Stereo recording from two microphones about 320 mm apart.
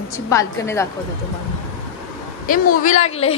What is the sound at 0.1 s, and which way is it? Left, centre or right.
Speech, centre.